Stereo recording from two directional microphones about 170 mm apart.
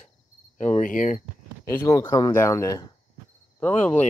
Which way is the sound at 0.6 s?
45° left (ahead or behind).